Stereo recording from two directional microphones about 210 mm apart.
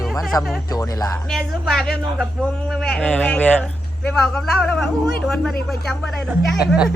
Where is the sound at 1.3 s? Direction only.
Centre (ahead or behind).